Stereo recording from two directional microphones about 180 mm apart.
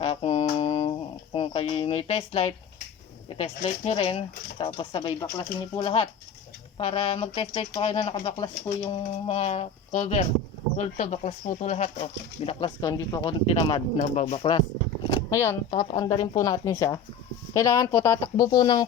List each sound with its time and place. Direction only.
0.0 s a sound: 35° left (ahead or behind)
3.2 s speech: 30° left (ahead or behind)
8.0 s speech: 20° left (ahead or behind); by 12.0 s 40° left (ahead or behind)
12.5 s speech: 30° left (ahead or behind)
15.1 s a sound: 15° left (ahead or behind)
15.7 s speech: 30° left (ahead or behind)